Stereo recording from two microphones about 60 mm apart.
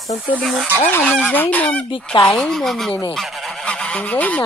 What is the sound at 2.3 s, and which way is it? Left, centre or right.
Speech, centre.